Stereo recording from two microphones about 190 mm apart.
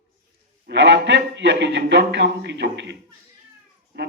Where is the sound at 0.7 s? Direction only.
65° right (ahead or behind).